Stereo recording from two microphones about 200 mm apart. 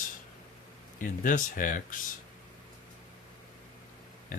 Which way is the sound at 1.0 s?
40° left (ahead or behind).